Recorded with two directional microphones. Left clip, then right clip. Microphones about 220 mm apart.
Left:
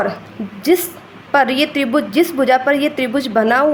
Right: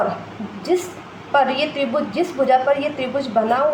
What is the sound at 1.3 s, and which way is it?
A woman's voice, 40° left (ahead or behind).